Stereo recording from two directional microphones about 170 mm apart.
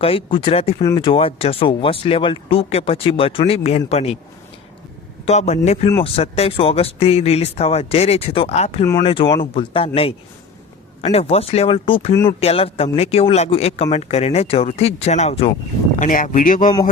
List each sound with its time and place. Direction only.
0.0 s speech: 35° left (ahead or behind)
5.2 s speech: 40° left (ahead or behind)
8.8 s speech: 20° left (ahead or behind); by 15.5 s 35° left (ahead or behind)
16.0 s speech: 50° left (ahead or behind)